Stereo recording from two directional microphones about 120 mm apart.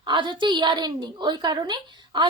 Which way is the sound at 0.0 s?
40° right (ahead or behind).